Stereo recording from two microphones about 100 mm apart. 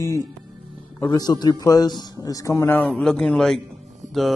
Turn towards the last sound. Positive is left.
turn(degrees=0)  # may be behind; listen again after turning